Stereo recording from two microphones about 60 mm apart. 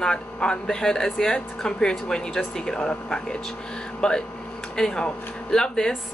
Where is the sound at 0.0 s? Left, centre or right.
Centre.